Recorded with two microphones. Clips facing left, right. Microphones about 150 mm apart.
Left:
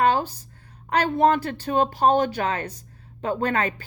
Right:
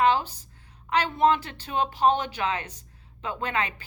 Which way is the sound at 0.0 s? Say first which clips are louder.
Left 2 dB; 45° left (ahead or behind).